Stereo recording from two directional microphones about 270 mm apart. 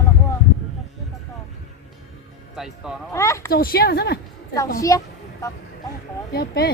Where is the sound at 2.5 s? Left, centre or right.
Centre.